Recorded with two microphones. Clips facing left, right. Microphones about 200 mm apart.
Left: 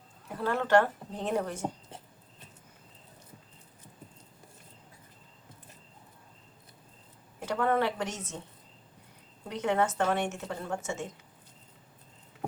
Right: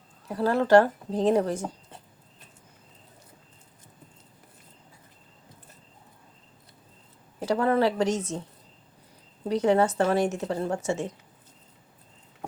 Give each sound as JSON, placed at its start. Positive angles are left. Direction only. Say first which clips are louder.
{"t": 0.3, "sound": "speech", "louder": "right 6 dB", "side_deg": -35}
{"t": 7.3, "sound": "speech", "louder": "right 5 dB", "side_deg": -35}
{"t": 9.4, "sound": "speech", "louder": "right 7 dB", "side_deg": -35}